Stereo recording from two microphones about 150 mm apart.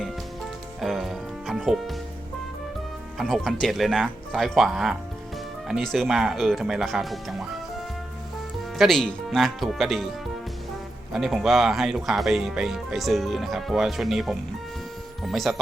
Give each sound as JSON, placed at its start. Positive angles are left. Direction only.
{"t": 0.8, "sound": "music", "side_deg": 0}
{"t": 3.2, "sound": "speech", "side_deg": 0}
{"t": 8.8, "sound": "speech", "side_deg": 5}
{"t": 11.1, "sound": "speech", "side_deg": 0}